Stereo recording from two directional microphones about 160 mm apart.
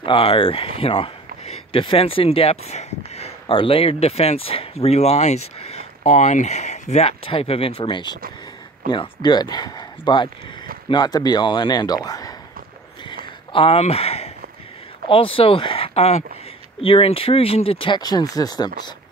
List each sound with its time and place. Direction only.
0.0 s speech: 35° left (ahead or behind)
13.0 s a sound: 30° left (ahead or behind)
15.0 s speech: 35° left (ahead or behind)